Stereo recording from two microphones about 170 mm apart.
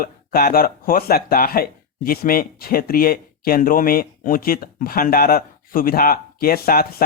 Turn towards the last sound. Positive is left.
turn(degrees=60)  # may be behind; listen again after turning